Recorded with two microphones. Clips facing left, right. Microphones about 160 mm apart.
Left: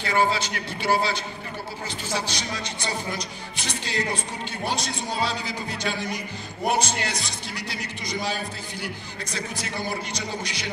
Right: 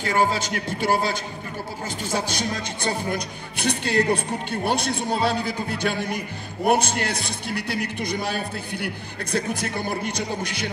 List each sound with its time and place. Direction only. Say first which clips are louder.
0.0 s a man's voice: right 1 dB; 45° right (ahead or behind)
2.1 s speech: right 4 dB; 50° right (ahead or behind)